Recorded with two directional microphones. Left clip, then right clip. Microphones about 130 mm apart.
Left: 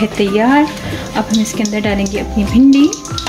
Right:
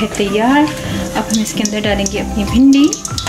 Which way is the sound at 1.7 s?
20° left (ahead or behind).